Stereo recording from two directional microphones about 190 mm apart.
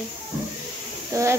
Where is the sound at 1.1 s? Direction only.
15° right (ahead or behind).